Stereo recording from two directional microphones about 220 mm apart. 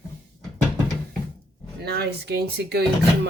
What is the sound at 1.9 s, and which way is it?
Speech, 45° right (ahead or behind).